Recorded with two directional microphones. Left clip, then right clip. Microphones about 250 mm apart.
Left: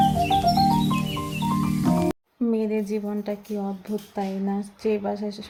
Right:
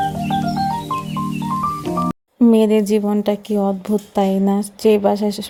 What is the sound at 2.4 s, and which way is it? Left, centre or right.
Speech, right.